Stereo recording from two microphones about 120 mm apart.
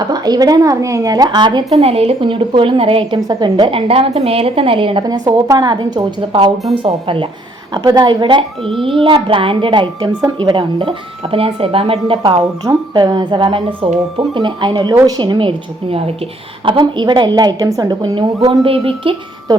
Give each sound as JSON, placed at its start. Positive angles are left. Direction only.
{"t": 0.0, "sound": "a woman's voice", "side_deg": -35}
{"t": 1.8, "sound": "a woman's voice", "side_deg": -55}
{"t": 3.2, "sound": "a woman's voice", "side_deg": -35}
{"t": 5.0, "sound": "a woman's voice", "side_deg": -35}
{"t": 7.7, "sound": "a woman's voice", "side_deg": -35}
{"t": 12.2, "sound": "a woman's voice", "side_deg": -35}
{"t": 16.6, "sound": "a woman's voice", "side_deg": -40}
{"t": 18.6, "sound": "a woman's voice", "side_deg": -50}